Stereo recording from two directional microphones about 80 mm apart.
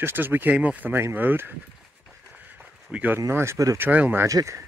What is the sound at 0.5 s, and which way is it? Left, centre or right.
Speech, right.